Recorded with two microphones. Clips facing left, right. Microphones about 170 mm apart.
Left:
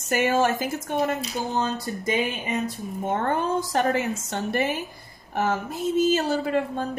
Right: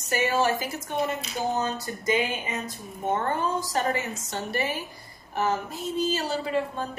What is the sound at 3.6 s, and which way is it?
A woman's voice, 60° left (ahead or behind).